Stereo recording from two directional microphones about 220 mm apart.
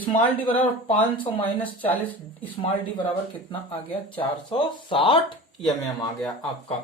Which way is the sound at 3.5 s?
25° left (ahead or behind).